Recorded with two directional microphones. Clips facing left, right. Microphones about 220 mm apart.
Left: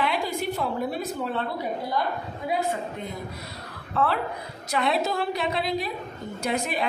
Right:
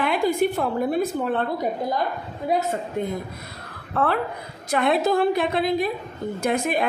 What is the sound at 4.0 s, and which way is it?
A woman's voice, 55° right (ahead or behind).